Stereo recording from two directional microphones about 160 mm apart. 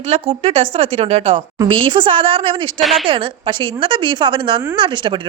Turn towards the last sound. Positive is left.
turn(degrees=-30)  # may be behind; listen again after turning